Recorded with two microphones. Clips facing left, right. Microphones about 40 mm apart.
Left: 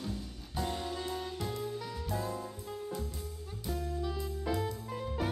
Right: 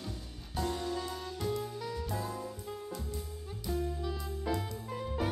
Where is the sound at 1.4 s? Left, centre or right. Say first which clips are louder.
Right 2 dB; centre.